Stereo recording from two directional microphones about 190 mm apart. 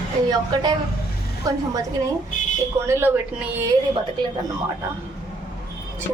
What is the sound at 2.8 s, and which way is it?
Speech, 10° right (ahead or behind).